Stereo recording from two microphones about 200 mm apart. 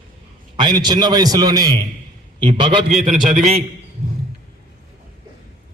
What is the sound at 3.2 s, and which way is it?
Speech, 40° right (ahead or behind).